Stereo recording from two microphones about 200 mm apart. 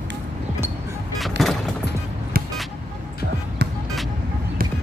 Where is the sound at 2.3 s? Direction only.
50° right (ahead or behind).